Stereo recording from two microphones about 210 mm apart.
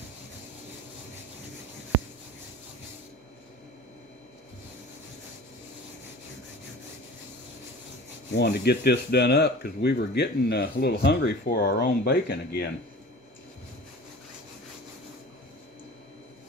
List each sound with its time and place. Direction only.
8.3 s speech: 50° left (ahead or behind)